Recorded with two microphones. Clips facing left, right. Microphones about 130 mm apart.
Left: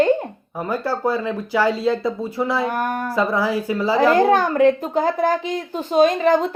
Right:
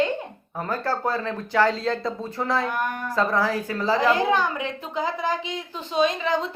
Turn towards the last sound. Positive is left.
turn(degrees=50)  # may be behind; listen again after turning